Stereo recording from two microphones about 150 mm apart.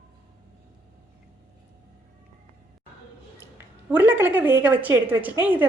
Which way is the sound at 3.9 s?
10° right (ahead or behind).